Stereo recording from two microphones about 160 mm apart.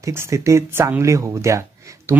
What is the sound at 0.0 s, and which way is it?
A man's voice, 15° right (ahead or behind).